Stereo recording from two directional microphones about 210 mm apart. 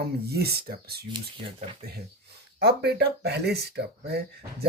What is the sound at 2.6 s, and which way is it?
Speech, 50° right (ahead or behind).